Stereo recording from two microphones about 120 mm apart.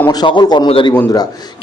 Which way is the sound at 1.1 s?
35° left (ahead or behind).